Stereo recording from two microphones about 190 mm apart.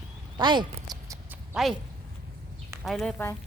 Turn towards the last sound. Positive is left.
turn(degrees=0)  # may be behind; listen again after turning